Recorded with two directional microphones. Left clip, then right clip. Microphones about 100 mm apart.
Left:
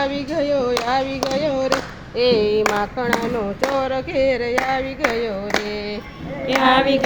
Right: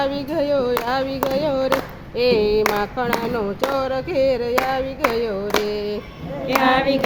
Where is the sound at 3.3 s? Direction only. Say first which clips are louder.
Left 1 dB; 35° right (ahead or behind).